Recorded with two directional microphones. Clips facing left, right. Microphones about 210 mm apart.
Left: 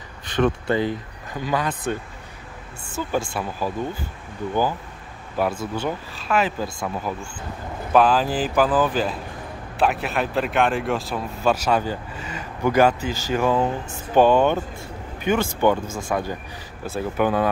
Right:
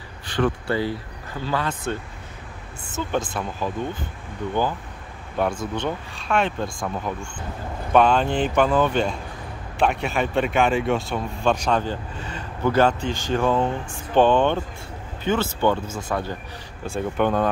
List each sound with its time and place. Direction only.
0.3 s speech: 20° left (ahead or behind)
3.1 s speech: 10° left (ahead or behind)
5.4 s speech: 5° left (ahead or behind)